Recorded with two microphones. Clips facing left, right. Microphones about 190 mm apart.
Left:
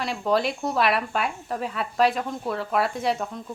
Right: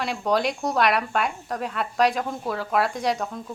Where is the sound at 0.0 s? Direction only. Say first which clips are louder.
Even; centre (ahead or behind).